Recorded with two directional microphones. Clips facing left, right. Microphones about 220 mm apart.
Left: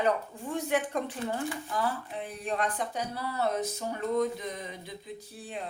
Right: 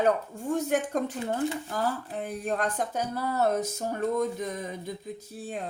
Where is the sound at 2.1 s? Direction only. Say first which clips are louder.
Right 3 dB; 45° right (ahead or behind).